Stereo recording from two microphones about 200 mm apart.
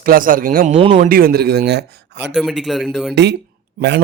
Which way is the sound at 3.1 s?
60° right (ahead or behind).